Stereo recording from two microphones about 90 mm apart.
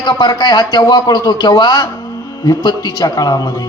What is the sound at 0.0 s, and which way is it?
Speech, 55° left (ahead or behind).